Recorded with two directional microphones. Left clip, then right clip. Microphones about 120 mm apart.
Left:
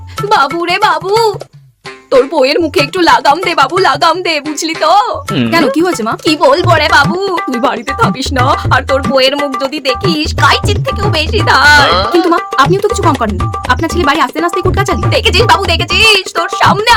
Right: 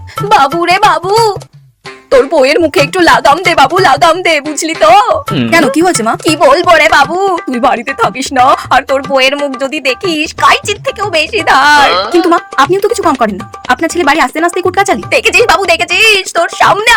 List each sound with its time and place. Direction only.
0.3 s speech: 35° right (ahead or behind)
7.6 s speech: 15° right (ahead or behind)
9.1 s a woman's voice: 10° right (ahead or behind)
11.9 s music: centre (ahead or behind)
12.3 s speech: 30° right (ahead or behind)